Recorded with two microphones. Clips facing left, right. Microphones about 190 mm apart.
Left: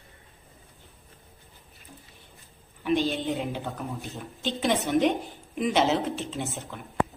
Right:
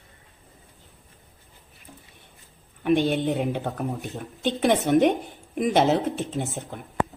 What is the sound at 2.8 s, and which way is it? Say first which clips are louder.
Speech: right 4 dB; 55° right (ahead or behind).